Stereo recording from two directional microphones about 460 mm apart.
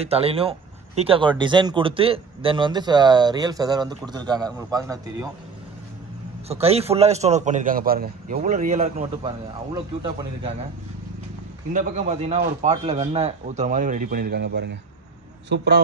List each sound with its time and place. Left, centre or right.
0.0 s speech: centre
6.5 s speech: centre
11.7 s a man's voice: centre